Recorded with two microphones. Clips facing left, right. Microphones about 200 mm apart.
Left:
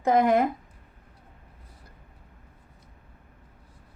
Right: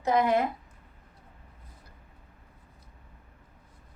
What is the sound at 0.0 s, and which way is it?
Speech, 50° left (ahead or behind).